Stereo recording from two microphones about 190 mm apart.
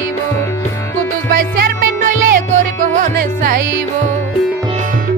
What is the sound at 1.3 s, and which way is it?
Music, 45° right (ahead or behind).